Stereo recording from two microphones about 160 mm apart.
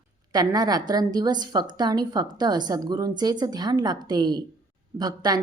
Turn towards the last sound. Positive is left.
turn(degrees=-25)  # may be behind; listen again after turning